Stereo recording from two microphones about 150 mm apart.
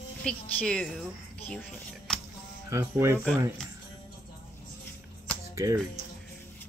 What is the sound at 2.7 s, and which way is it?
Speech, 15° right (ahead or behind).